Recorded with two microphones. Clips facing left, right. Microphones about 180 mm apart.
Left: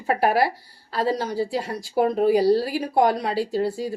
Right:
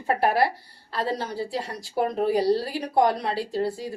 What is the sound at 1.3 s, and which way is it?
Speech, centre (ahead or behind).